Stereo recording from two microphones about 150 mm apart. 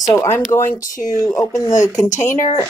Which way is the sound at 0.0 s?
20° left (ahead or behind).